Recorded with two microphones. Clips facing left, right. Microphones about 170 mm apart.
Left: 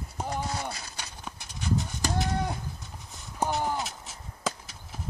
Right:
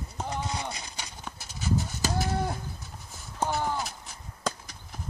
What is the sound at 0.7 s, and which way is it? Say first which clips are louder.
Livestock: right 1 dB; 15° right (ahead or behind).